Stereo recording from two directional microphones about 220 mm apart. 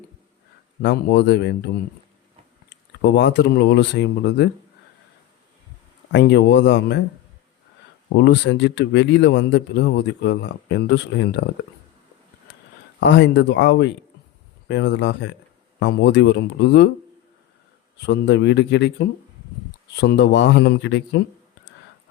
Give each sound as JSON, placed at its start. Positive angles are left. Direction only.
{"t": 0.8, "sound": "speech", "side_deg": 50}
{"t": 6.1, "sound": "speech", "side_deg": 50}
{"t": 8.1, "sound": "speech", "side_deg": 50}
{"t": 13.0, "sound": "speech", "side_deg": 50}
{"t": 18.0, "sound": "speech", "side_deg": 50}